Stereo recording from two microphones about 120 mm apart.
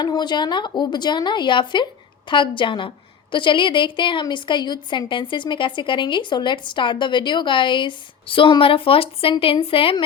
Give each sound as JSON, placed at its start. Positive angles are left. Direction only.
{"t": 0.0, "sound": "a woman's voice", "side_deg": 35}